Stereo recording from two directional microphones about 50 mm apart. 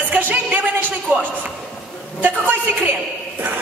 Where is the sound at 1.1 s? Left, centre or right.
Right.